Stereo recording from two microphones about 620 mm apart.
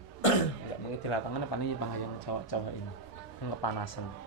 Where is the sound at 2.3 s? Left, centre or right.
Left.